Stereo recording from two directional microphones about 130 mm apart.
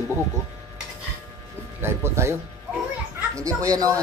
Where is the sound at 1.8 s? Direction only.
20° right (ahead or behind).